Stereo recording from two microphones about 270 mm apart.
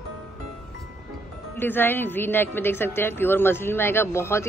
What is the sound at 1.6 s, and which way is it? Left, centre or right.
Speech, centre.